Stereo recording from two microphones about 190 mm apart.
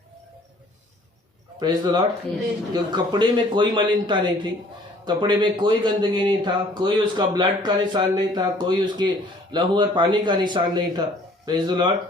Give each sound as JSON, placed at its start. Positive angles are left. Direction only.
{"t": 1.5, "sound": "speech", "side_deg": -20}